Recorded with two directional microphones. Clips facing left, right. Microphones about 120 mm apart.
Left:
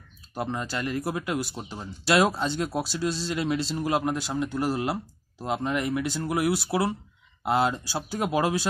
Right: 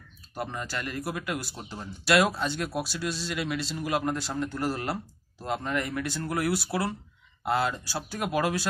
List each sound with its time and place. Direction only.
0.3 s speech: 20° left (ahead or behind)
4.0 s speech: 15° left (ahead or behind)